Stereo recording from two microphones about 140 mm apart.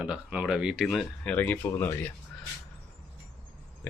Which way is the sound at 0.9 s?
5° left (ahead or behind).